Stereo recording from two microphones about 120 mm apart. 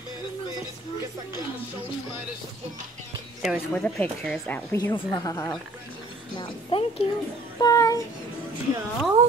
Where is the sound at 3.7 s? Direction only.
10° left (ahead or behind).